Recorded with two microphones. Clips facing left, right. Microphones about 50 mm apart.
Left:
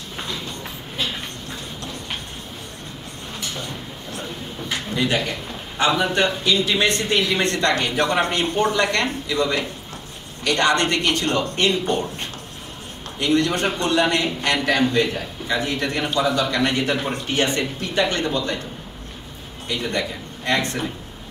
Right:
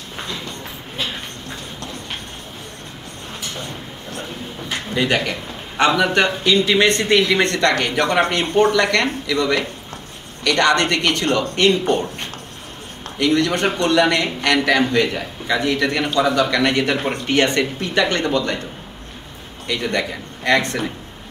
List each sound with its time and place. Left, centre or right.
0.2 s a sound: right
3.5 s a sound: right
4.9 s a man's voice: right
13.2 s a man's voice: right
15.4 s a man's voice: right
19.7 s a man's voice: right